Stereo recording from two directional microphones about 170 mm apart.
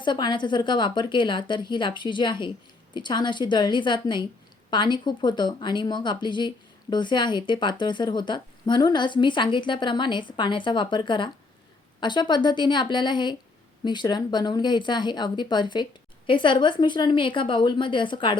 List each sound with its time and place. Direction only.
0.0 s speech: 25° left (ahead or behind)